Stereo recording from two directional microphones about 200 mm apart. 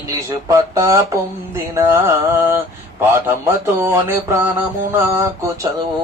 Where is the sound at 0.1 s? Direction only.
15° right (ahead or behind).